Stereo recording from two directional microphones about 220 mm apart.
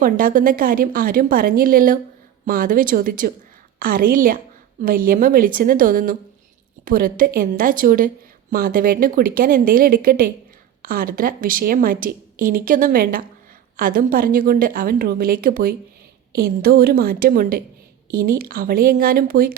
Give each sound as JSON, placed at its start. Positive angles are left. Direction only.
{"t": 0.0, "sound": "a woman's voice", "side_deg": -40}